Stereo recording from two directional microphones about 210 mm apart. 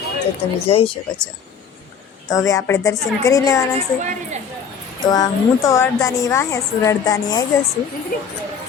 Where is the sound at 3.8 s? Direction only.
35° right (ahead or behind).